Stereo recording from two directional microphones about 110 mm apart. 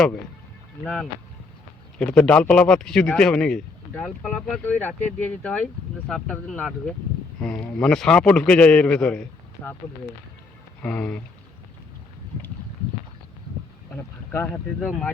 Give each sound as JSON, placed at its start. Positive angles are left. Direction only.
{"t": 2.0, "sound": "speech", "side_deg": 10}
{"t": 10.8, "sound": "speech", "side_deg": 10}
{"t": 13.9, "sound": "a sound", "side_deg": 15}
{"t": 14.8, "sound": "speech", "side_deg": 5}